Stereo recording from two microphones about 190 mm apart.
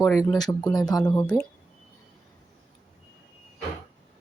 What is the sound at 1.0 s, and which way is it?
Speech, 10° left (ahead or behind).